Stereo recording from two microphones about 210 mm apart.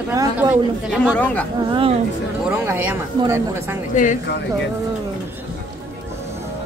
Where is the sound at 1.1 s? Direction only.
5° left (ahead or behind).